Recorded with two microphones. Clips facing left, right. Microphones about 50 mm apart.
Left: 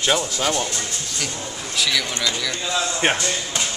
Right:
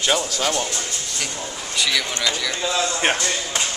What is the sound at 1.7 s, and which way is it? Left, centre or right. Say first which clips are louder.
A man's voice: even; centre.